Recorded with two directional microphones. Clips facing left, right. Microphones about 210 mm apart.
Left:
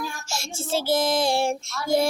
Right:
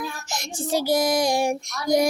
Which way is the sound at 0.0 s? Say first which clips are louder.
Right 1 dB; 15° right (ahead or behind).